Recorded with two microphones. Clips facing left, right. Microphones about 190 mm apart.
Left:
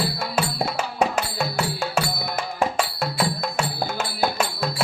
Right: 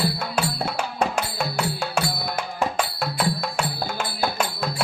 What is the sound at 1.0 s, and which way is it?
Music, 5° left (ahead or behind).